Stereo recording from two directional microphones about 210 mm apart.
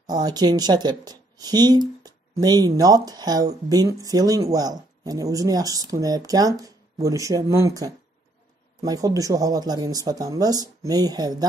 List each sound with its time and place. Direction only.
0.0 s speech: 20° right (ahead or behind)